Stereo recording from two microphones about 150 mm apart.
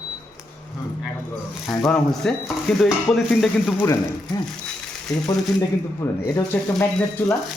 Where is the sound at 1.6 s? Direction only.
5° left (ahead or behind).